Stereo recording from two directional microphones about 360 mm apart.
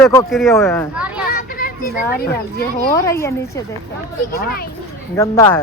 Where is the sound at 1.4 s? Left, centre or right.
Left.